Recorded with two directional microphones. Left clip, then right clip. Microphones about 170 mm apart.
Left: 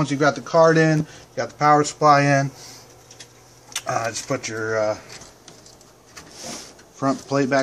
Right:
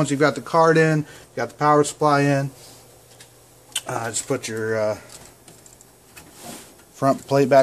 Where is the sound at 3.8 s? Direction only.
40° right (ahead or behind).